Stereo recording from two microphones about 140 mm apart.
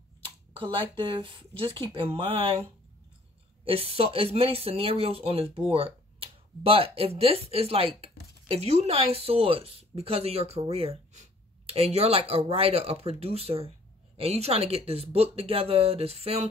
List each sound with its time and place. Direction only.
0.6 s speech: 40° right (ahead or behind)
3.6 s speech: 45° right (ahead or behind)